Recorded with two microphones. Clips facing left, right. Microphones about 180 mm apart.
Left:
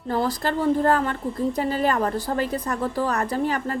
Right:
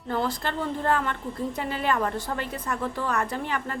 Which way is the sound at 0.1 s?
35° left (ahead or behind).